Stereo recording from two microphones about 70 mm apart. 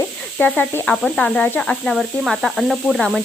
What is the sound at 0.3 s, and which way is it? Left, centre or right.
Speech, centre.